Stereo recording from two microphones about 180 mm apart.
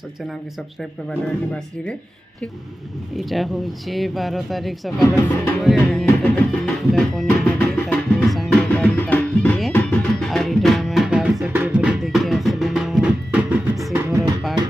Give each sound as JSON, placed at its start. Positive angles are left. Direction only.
{"t": 3.2, "sound": "speech", "side_deg": 0}
{"t": 6.0, "sound": "music", "side_deg": 5}
{"t": 13.9, "sound": "music", "side_deg": -15}